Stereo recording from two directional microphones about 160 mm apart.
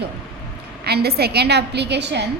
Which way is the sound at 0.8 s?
85° right.